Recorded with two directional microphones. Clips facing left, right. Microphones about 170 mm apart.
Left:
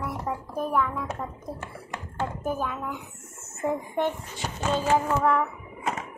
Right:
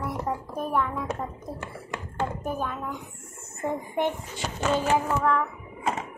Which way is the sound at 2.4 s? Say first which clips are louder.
Left 1 dB; centre (ahead or behind).